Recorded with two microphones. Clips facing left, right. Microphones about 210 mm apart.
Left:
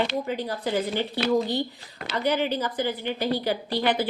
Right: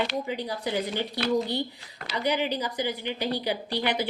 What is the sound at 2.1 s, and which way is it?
A woman's voice, 15° right (ahead or behind).